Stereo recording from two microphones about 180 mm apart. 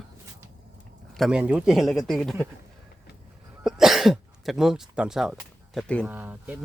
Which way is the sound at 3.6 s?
Centre (ahead or behind).